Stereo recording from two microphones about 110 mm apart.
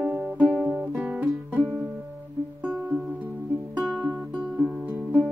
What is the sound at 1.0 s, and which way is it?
Music, 15° right (ahead or behind).